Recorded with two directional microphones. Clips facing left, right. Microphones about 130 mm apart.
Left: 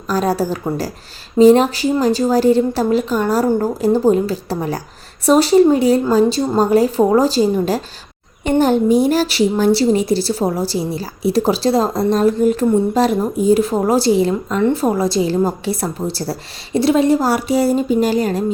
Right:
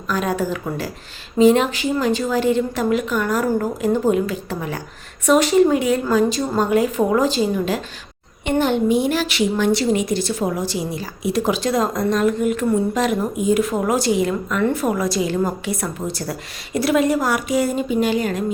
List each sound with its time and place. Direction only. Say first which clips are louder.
0.1 s a woman's voice: left 4 dB; 35° left (ahead or behind)